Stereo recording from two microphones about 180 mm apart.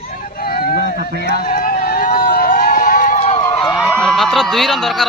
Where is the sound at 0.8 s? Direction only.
60° right (ahead or behind).